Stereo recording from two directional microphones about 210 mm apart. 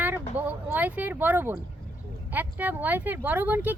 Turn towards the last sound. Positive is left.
turn(degrees=-10)  # may be behind; listen again after turning